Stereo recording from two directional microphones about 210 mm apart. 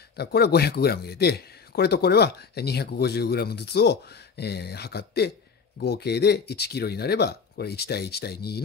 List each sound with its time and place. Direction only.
0.1 s speech: 50° left (ahead or behind)